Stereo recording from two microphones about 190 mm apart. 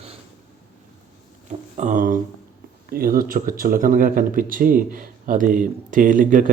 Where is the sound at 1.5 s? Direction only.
40° right (ahead or behind).